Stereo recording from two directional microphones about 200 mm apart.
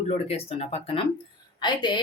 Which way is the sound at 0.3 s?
30° left (ahead or behind).